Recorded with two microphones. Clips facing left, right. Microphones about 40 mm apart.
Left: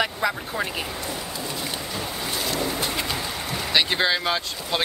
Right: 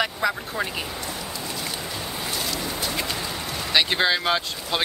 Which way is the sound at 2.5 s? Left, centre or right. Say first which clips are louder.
Left 2 dB; centre.